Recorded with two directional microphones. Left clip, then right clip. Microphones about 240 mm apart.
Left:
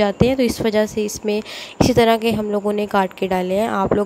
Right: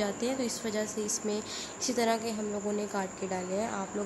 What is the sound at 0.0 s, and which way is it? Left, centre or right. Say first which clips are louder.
A woman's voice: left 15 dB; left.